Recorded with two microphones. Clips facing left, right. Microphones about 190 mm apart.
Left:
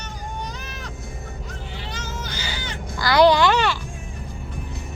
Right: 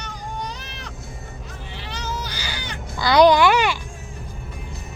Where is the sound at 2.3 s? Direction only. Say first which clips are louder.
Left 1 dB; 15° right (ahead or behind).